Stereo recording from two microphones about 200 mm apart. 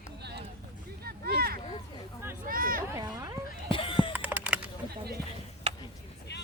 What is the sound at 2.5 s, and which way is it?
Speech, 45° right (ahead or behind).